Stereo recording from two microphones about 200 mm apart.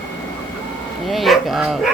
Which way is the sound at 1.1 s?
Centre (ahead or behind).